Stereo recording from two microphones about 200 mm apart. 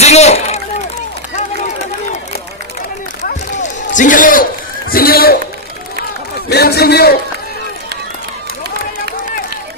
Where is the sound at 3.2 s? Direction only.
40° left (ahead or behind).